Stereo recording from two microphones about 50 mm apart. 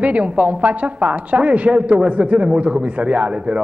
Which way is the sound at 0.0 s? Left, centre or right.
Right.